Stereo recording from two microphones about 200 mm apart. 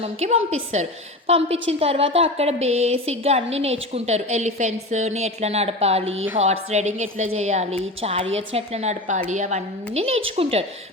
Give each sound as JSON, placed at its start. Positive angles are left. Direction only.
{"t": 0.0, "sound": "a woman's voice", "side_deg": -30}